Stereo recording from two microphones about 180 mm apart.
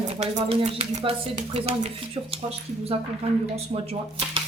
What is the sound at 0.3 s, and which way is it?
Speech, 30° right (ahead or behind).